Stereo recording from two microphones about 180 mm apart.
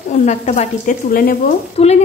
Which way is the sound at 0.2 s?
40° left (ahead or behind).